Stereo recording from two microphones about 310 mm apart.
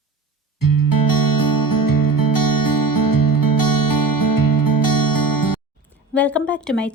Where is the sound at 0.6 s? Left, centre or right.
Left.